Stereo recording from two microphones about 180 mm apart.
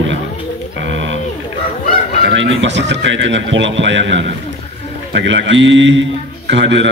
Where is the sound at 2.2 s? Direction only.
90° right.